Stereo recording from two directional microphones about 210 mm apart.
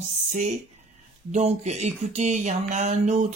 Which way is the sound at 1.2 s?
35° right (ahead or behind).